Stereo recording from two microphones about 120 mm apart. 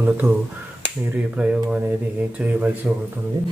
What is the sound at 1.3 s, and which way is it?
Speech, 10° right (ahead or behind).